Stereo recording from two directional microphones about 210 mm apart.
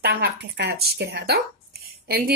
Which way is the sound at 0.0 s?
50° right (ahead or behind).